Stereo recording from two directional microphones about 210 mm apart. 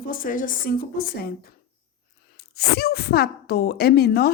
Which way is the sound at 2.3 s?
50° left (ahead or behind).